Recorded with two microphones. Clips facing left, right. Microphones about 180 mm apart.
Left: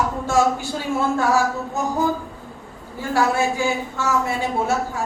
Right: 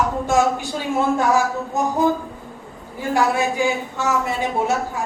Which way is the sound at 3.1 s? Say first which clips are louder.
Even; 15° right (ahead or behind).